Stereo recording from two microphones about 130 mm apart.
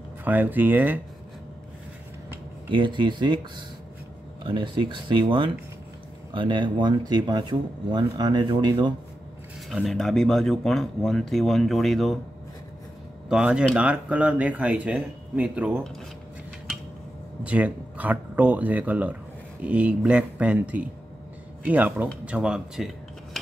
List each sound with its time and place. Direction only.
0.2 s speech: 15° right (ahead or behind)
2.7 s speech: 40° right (ahead or behind)
4.5 s speech: 40° right (ahead or behind)
9.7 s speech: centre (ahead or behind)
13.3 s speech: 10° right (ahead or behind)
17.4 s speech: 10° right (ahead or behind)